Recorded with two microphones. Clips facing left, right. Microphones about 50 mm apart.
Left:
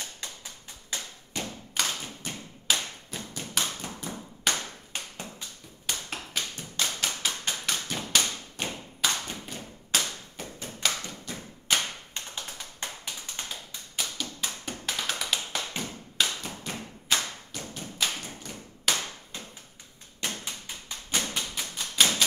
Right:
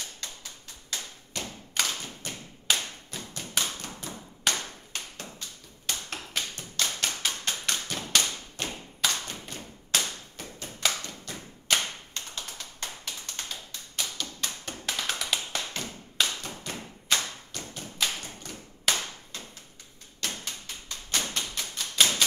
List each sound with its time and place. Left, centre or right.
0.0 s tap: left
1.7 s clapping: centre
3.8 s a sound: centre
6.3 s tap: centre
9.9 s clapping: centre
11.7 s a sound: centre
12.1 s tap: centre
16.2 s clapping: centre
17.7 s thump: centre
20.2 s tap: centre